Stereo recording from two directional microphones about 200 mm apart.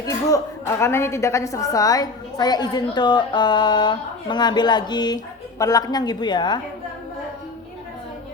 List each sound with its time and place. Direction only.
0.0 s a woman's voice: 15° left (ahead or behind)